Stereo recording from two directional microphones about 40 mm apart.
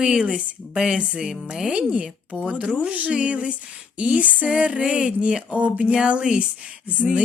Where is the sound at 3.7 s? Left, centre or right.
Right.